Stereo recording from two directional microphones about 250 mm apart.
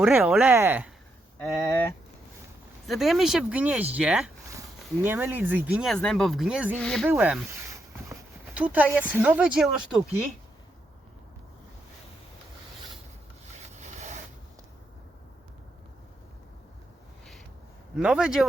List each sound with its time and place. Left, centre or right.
0.0 s speech: centre
1.4 s speech: centre
2.8 s speech: centre
8.5 s speech: centre
13.7 s rub: right
17.9 s speech: centre